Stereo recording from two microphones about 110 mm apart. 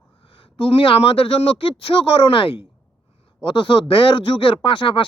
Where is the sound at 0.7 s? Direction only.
60° left (ahead or behind).